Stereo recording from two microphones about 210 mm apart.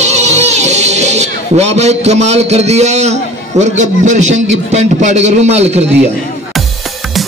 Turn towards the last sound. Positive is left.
turn(degrees=-30)  # may be behind; listen again after turning